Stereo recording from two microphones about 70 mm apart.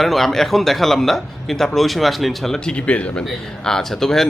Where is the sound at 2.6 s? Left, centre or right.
Centre.